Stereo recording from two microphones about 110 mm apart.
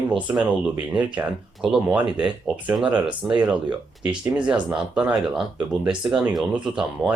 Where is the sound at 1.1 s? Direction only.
10° right (ahead or behind).